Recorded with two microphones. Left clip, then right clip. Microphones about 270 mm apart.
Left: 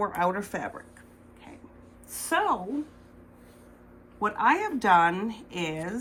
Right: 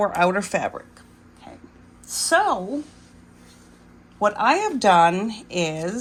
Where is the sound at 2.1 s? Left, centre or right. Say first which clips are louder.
Right 7 dB; centre.